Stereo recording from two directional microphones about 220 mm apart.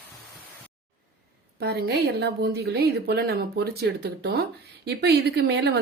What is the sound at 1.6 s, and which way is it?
Speech, 45° right (ahead or behind).